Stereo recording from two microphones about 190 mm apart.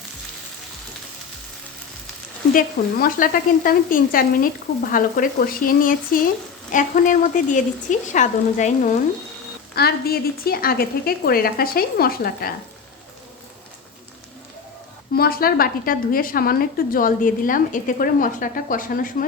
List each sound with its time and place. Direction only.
2.5 s a woman's voice: 45° left (ahead or behind)
9.7 s a woman's voice: 55° left (ahead or behind)
15.1 s a woman's voice: 55° left (ahead or behind)